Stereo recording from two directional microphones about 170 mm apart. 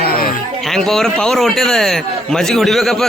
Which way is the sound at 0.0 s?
60° left (ahead or behind).